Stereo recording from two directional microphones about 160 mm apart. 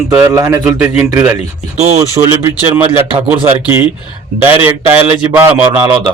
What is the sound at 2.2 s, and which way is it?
Speech, 45° right (ahead or behind).